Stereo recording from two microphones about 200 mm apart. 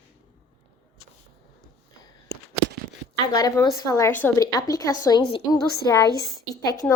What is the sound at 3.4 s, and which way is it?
A woman's voice, 20° left (ahead or behind).